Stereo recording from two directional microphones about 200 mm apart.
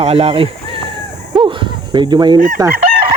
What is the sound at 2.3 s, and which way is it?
Chicken, 40° right (ahead or behind).